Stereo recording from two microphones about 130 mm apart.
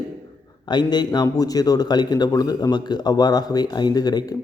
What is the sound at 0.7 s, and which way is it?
A man's voice, 35° left (ahead or behind).